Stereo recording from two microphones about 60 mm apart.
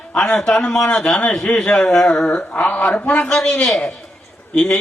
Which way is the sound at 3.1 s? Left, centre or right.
Centre.